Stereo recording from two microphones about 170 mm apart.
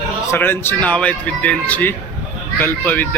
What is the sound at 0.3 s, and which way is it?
Speech, 10° left (ahead or behind).